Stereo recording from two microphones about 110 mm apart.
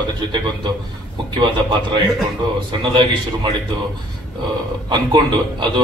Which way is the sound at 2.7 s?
45° right (ahead or behind).